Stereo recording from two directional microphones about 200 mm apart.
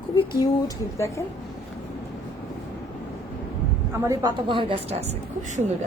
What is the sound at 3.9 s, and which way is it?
A woman's voice, 15° right (ahead or behind).